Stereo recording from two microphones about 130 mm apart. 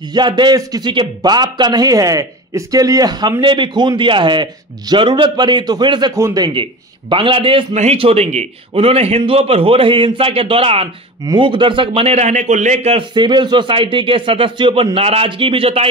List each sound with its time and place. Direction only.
0.1 s a man's voice: 35° right (ahead or behind)
7.7 s a man's voice: 55° right (ahead or behind)
12.9 s a man's voice: 35° right (ahead or behind)